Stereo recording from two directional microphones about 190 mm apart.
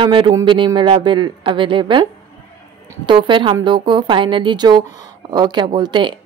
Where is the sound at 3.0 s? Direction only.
25° right (ahead or behind).